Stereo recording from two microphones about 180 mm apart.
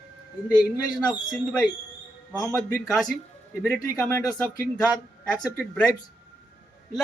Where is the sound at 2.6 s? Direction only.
10° left (ahead or behind).